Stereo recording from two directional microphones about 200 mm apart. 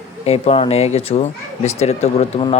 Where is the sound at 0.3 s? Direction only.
30° left (ahead or behind).